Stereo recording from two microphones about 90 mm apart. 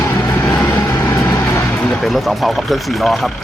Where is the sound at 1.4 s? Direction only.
25° left (ahead or behind).